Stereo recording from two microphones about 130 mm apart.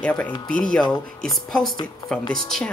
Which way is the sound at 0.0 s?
10° left (ahead or behind).